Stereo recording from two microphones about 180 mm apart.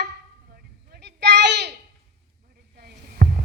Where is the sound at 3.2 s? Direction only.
50° right (ahead or behind).